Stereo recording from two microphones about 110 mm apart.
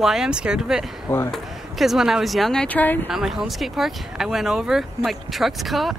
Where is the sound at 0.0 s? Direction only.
5° right (ahead or behind); by 3.1 s 15° left (ahead or behind).